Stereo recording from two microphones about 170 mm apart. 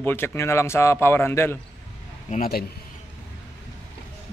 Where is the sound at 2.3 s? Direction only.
60° left (ahead or behind).